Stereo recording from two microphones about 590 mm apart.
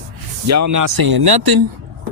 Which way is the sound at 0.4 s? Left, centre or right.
Right.